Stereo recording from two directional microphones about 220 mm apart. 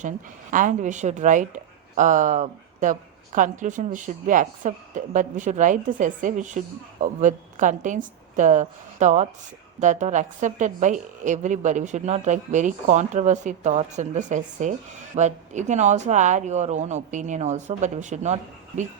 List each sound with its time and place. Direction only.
0.5 s a woman's voice: 35° right (ahead or behind)